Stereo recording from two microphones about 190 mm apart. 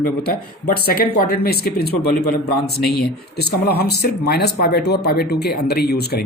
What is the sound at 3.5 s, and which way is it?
Speech, 55° left (ahead or behind).